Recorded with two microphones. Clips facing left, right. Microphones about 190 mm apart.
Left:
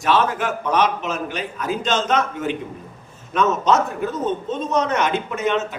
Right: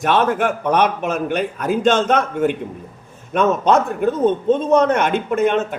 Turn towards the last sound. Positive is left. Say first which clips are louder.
# right 5 dB
turn(degrees=-50)  # may be behind; listen again after turning